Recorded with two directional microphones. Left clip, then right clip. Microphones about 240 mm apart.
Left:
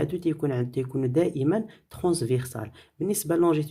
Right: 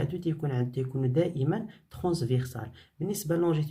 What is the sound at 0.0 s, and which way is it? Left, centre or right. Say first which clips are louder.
Speech: left 6 dB; left.